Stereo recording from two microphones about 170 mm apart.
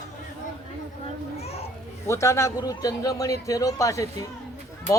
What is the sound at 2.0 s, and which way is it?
A man's voice, 15° left (ahead or behind).